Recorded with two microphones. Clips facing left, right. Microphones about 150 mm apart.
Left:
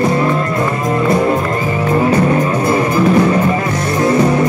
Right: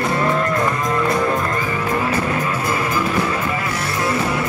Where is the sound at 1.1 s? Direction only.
25° left (ahead or behind).